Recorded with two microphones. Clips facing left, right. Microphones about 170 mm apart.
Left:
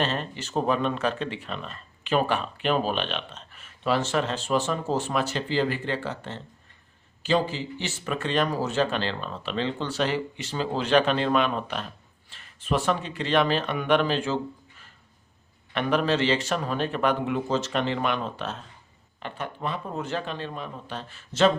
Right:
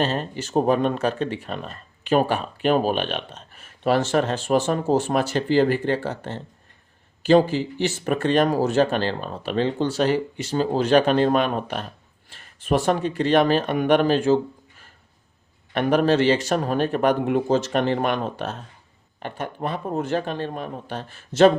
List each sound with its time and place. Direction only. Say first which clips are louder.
0.0 s speech: right 4 dB; 40° right (ahead or behind)
7.5 s speech: right 9 dB; 50° right (ahead or behind)
15.7 s speech: right 5 dB; 45° right (ahead or behind)